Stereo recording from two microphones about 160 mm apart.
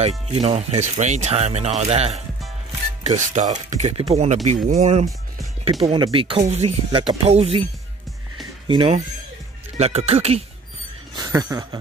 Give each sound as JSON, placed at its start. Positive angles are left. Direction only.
{"t": 0.3, "sound": "speech", "side_deg": -40}
{"t": 5.8, "sound": "speech", "side_deg": -30}
{"t": 8.6, "sound": "speech", "side_deg": -35}
{"t": 11.1, "sound": "speech", "side_deg": -25}